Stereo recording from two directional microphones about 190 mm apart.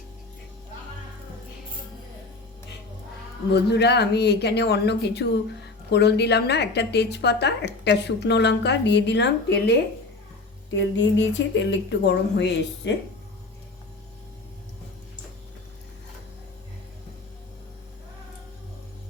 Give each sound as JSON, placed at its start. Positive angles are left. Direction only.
{"t": 3.5, "sound": "a woman's voice", "side_deg": 60}
{"t": 10.8, "sound": "a woman's voice", "side_deg": 75}